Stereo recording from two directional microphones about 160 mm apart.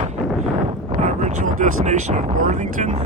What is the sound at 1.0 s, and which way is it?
Speech, 50° right (ahead or behind).